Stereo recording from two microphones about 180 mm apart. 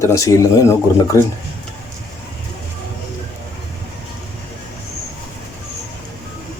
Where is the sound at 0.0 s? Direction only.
15° left (ahead or behind).